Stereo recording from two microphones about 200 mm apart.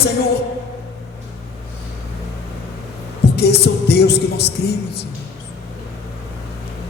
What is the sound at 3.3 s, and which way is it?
Music, 55° left (ahead or behind).